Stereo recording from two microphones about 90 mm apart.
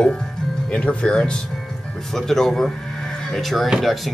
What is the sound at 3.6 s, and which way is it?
Speech, 10° right (ahead or behind).